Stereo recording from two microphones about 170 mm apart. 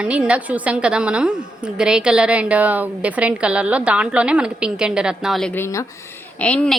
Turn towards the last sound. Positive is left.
turn(degrees=5)  # may be behind; listen again after turning